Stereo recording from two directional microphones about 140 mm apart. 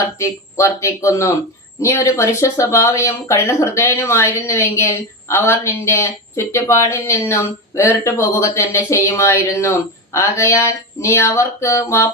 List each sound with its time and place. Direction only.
0.2 s speech: 20° left (ahead or behind)